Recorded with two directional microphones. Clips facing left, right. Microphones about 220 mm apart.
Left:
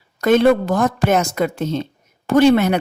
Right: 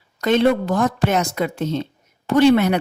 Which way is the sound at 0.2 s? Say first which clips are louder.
Left 3 dB; 50° left (ahead or behind).